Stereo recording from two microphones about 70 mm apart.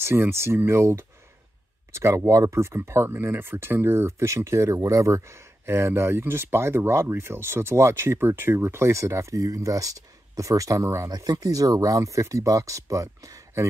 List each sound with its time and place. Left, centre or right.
0.0 s speech: right
11.1 s speech: right